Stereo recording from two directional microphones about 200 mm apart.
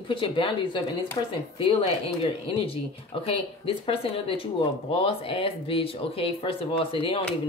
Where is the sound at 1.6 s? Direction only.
25° left (ahead or behind).